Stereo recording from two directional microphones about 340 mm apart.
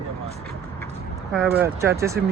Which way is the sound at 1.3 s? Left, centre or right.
Centre.